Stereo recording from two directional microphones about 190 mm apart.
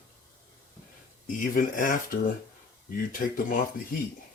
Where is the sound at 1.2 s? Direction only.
45° left (ahead or behind).